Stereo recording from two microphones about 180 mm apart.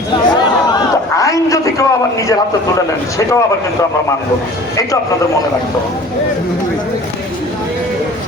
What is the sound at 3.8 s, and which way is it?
Speech, 20° left (ahead or behind).